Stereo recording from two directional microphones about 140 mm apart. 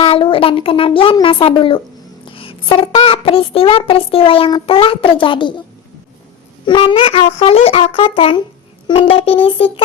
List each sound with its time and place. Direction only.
0.0 s a child's voice: 40° left (ahead or behind)
6.7 s a child's voice: 40° left (ahead or behind)